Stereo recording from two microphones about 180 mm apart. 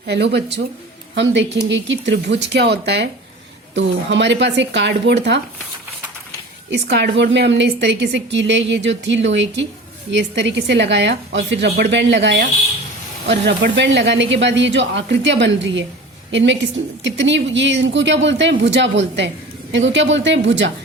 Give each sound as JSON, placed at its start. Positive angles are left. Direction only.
{"t": 0.0, "sound": "speech", "side_deg": -70}
{"t": 6.7, "sound": "a woman's voice", "side_deg": -70}